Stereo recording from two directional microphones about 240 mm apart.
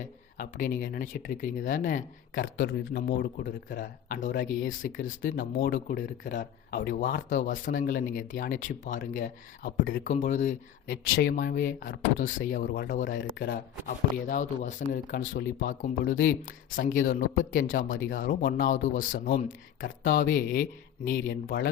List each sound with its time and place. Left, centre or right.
0.3 s speech: left